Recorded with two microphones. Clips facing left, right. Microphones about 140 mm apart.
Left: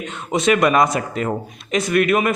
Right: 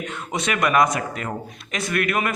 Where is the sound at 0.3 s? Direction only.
25° left (ahead or behind).